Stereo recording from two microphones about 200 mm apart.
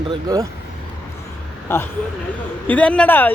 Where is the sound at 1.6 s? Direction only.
10° left (ahead or behind).